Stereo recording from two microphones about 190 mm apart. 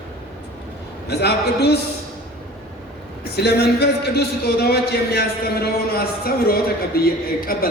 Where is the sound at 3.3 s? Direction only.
60° left (ahead or behind).